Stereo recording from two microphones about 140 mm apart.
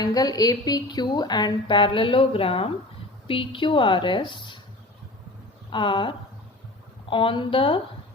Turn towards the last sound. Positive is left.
turn(degrees=40)  # may be behind; listen again after turning